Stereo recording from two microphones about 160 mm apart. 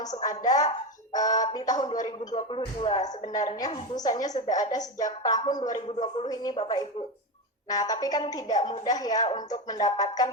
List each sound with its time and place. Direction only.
0.0 s a woman's voice: 25° left (ahead or behind)